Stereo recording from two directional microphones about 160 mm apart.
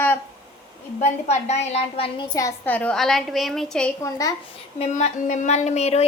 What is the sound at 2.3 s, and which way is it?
A woman's voice, 15° left (ahead or behind).